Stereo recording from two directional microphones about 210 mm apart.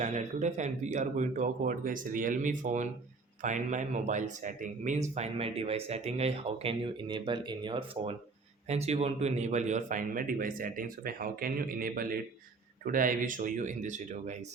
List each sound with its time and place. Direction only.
0.0 s a man's voice: 35° right (ahead or behind)